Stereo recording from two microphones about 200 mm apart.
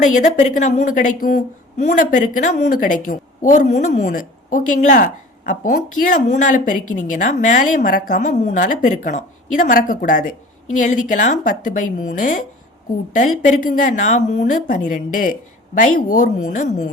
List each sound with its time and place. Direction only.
0.0 s a woman's voice: 40° left (ahead or behind)